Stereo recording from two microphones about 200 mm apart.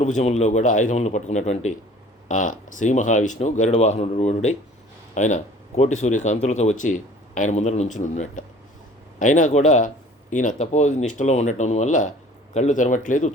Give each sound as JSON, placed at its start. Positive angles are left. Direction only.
{"t": 0.0, "sound": "speech", "side_deg": 35}